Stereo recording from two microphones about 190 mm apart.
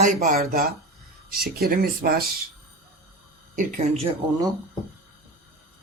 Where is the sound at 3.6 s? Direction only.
40° right (ahead or behind).